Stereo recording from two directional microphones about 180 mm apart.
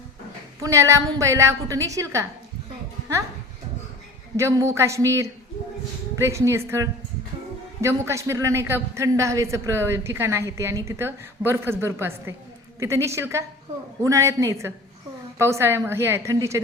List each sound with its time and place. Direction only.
0.6 s a woman's voice: 15° right (ahead or behind)
4.4 s a woman's voice: 15° right (ahead or behind)